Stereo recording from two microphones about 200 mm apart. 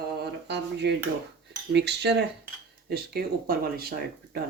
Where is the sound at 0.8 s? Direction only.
55° right (ahead or behind).